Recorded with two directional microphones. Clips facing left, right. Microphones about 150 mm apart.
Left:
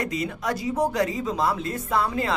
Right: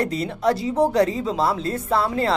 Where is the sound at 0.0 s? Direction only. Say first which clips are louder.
Right 6 dB; 30° right (ahead or behind).